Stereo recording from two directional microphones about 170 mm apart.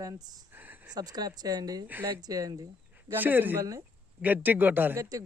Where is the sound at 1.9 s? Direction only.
10° right (ahead or behind).